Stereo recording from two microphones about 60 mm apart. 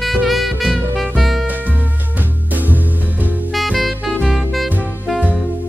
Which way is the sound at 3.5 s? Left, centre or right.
Centre.